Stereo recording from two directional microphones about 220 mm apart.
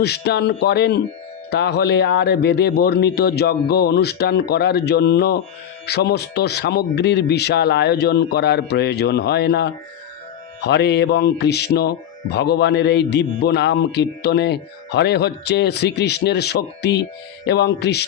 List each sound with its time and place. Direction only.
0.0 s speech: 50° left (ahead or behind)